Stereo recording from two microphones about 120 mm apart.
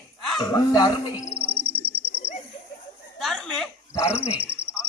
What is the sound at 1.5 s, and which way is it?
Frog, 45° right (ahead or behind).